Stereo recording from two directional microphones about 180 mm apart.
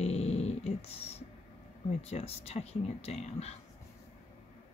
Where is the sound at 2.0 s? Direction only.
35° left (ahead or behind).